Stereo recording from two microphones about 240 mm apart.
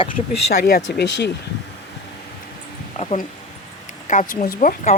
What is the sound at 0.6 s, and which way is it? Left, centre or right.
Speech, left.